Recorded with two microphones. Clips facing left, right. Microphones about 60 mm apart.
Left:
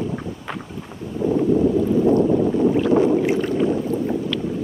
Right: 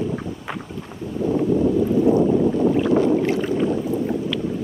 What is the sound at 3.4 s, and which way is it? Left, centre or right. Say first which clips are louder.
Boat: left 1 dB; centre.